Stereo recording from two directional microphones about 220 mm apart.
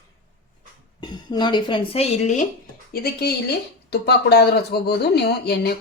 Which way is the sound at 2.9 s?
45° left (ahead or behind).